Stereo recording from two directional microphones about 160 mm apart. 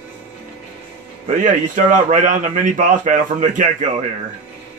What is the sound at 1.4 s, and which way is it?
A man's voice, 50° right (ahead or behind).